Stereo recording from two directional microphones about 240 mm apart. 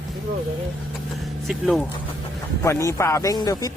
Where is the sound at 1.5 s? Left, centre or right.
Centre.